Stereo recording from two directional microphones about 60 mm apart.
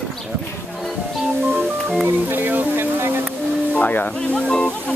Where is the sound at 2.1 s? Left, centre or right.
Right.